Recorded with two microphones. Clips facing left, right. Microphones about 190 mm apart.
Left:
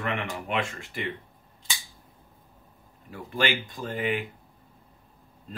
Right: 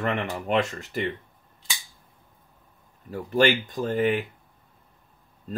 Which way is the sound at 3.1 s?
45° right (ahead or behind).